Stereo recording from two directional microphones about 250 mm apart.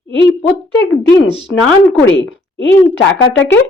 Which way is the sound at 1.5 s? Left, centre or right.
Left.